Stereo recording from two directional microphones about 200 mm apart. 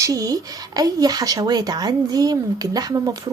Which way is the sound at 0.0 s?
15° right (ahead or behind).